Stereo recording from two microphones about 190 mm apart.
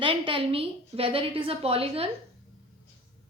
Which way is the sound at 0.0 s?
25° right (ahead or behind).